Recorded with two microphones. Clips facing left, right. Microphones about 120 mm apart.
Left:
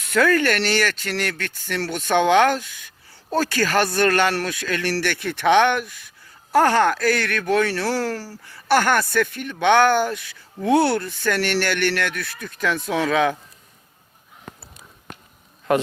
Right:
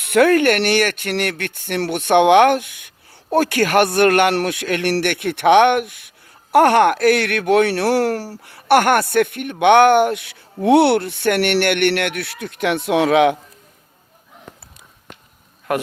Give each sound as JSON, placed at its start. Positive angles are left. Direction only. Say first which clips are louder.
{"t": 0.0, "sound": "speech", "louder": "right 5 dB", "side_deg": -60}